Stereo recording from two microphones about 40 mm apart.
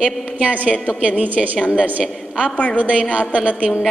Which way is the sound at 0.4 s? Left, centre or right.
Right.